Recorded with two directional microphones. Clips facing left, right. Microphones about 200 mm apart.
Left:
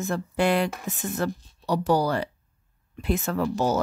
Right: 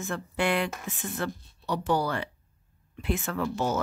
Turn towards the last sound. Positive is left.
turn(degrees=40)  # may be behind; listen again after turning